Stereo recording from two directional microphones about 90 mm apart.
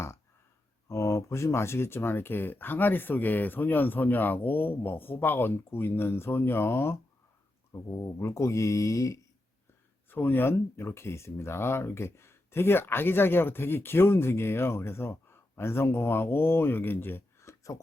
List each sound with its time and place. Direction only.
0.9 s speech: 30° left (ahead or behind)
7.7 s speech: 35° left (ahead or behind)
10.1 s speech: 20° left (ahead or behind)